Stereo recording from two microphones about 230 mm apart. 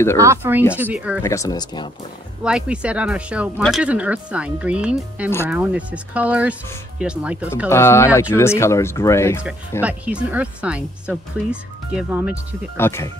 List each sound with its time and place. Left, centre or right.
0.2 s speech: centre
1.2 s speech: centre
2.4 s speech: centre
7.7 s speech: centre
9.8 s speech: centre
12.7 s speech: centre